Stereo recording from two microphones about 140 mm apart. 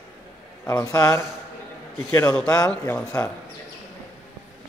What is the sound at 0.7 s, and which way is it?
A man's voice, 25° left (ahead or behind).